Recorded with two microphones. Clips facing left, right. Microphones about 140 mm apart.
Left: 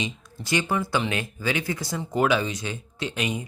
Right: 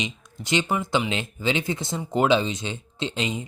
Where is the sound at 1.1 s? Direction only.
20° right (ahead or behind).